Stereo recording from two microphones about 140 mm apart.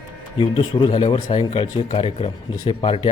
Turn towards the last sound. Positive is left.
turn(degrees=40)  # may be behind; listen again after turning